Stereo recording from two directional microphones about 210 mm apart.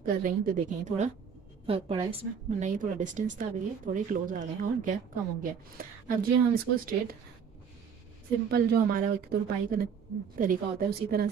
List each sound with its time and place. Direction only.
0.0 s a woman's voice: 40° right (ahead or behind)
8.5 s speech: 50° right (ahead or behind)